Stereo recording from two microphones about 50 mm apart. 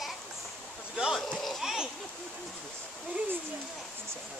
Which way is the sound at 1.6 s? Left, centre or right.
Centre.